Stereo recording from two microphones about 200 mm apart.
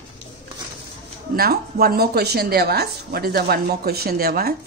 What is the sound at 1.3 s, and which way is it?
A woman's voice, 50° right (ahead or behind).